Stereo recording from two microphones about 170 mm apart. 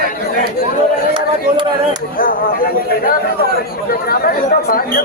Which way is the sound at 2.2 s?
55° left (ahead or behind).